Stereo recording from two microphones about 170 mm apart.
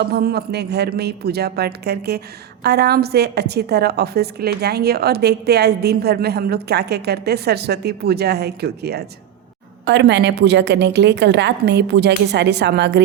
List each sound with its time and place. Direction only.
0.1 s a woman's voice: 70° right (ahead or behind)
9.8 s a woman's voice: 90° right